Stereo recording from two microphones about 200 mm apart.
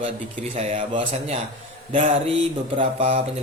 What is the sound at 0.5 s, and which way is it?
Speech, 30° right (ahead or behind).